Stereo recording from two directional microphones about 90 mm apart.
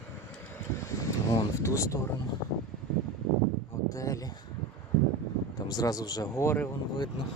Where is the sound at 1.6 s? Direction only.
35° left (ahead or behind).